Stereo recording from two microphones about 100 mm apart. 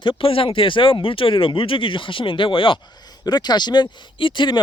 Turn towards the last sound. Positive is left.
turn(degrees=50)  # may be behind; listen again after turning